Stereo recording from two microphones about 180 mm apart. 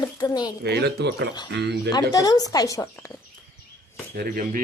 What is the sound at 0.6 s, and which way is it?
Speech, 65° right (ahead or behind).